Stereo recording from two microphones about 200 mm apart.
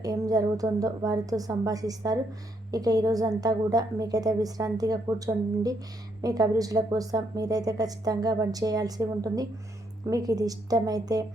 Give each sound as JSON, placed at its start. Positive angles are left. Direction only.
{"t": 0.0, "sound": "a woman's voice", "side_deg": -20}